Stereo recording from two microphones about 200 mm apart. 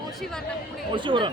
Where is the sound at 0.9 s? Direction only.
25° right (ahead or behind).